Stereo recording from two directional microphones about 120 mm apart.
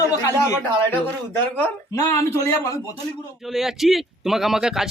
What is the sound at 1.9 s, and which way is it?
Speech, 25° left (ahead or behind).